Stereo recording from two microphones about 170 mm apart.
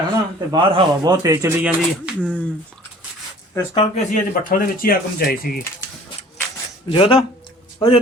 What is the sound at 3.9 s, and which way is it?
Speech, 50° left (ahead or behind).